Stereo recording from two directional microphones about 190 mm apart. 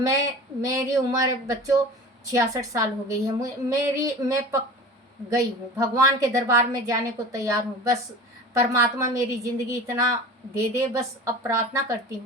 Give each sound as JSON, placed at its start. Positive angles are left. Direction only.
{"t": 0.0, "sound": "a woman's voice", "side_deg": -15}
{"t": 11.4, "sound": "a woman's voice", "side_deg": -15}